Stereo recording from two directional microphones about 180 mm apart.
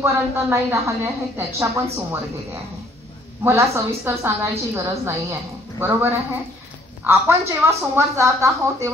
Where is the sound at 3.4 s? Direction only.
15° right (ahead or behind).